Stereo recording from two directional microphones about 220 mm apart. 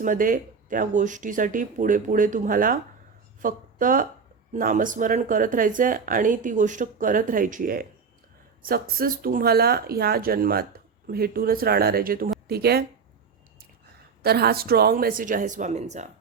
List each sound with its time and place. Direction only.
0.0 s speech: 40° right (ahead or behind)
14.2 s speech: 45° right (ahead or behind)